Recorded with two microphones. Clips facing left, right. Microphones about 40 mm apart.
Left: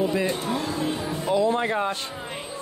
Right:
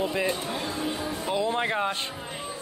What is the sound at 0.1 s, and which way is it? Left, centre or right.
Speech, centre.